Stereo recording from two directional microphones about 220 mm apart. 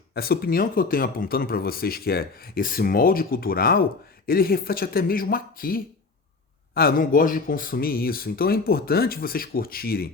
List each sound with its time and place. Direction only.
0.1 s speech: 45° left (ahead or behind)